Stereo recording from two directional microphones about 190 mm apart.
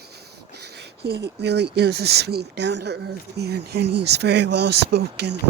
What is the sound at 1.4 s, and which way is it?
Speech, 60° right (ahead or behind).